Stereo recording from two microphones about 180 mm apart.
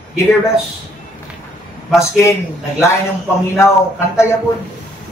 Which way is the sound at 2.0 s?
15° left (ahead or behind).